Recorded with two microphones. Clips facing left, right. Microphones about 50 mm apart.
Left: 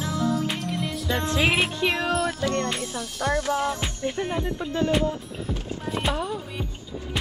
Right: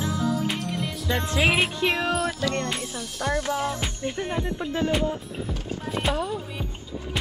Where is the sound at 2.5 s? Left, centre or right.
Centre.